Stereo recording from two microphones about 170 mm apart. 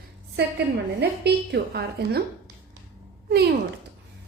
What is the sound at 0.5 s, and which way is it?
A woman's voice, 75° right (ahead or behind).